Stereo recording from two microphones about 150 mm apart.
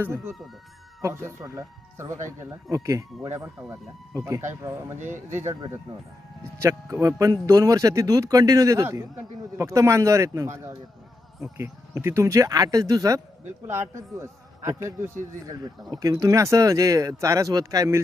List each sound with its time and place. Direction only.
0.0 s speech: 15° right (ahead or behind)
6.6 s speech: 20° right (ahead or behind)